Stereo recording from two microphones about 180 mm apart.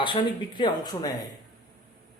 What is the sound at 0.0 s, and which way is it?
Speech, 25° left (ahead or behind).